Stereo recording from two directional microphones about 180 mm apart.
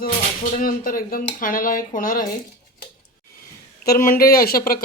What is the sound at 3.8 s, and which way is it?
Speech, 55° left (ahead or behind).